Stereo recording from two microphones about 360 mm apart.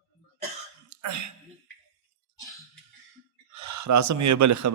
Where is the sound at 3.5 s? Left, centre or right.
Right.